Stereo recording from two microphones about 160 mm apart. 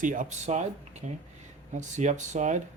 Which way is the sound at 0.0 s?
55° right (ahead or behind).